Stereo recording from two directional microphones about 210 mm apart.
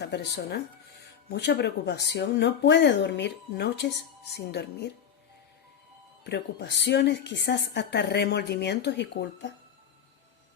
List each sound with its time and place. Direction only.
0.0 s a woman's voice: 50° left (ahead or behind)
6.2 s a woman's voice: 55° left (ahead or behind)